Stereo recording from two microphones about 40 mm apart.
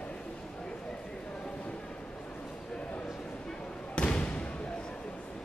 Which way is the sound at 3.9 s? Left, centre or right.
Left.